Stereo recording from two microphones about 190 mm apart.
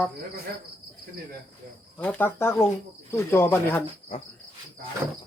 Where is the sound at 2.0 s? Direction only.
10° left (ahead or behind).